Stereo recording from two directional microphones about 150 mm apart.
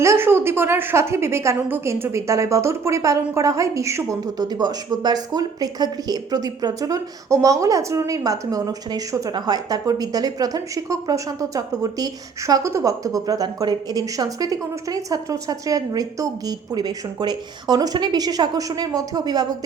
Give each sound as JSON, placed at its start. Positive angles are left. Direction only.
{"t": 0.0, "sound": "a woman's voice", "side_deg": -15}